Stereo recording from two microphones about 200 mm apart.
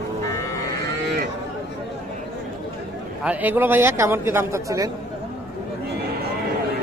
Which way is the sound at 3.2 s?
10° right (ahead or behind).